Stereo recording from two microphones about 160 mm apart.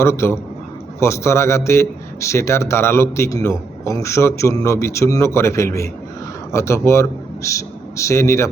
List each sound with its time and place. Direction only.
0.0 s a man's voice: 15° left (ahead or behind)